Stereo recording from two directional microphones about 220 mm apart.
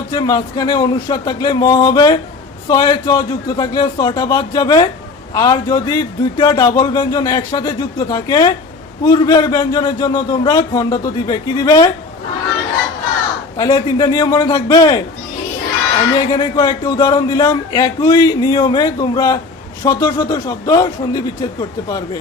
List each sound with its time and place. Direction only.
0.1 s a man's voice: 20° left (ahead or behind)
13.6 s a man's voice: 20° left (ahead or behind)
16.1 s a man's voice: 20° left (ahead or behind)